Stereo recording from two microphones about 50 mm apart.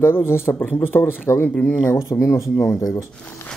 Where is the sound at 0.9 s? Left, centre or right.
Left.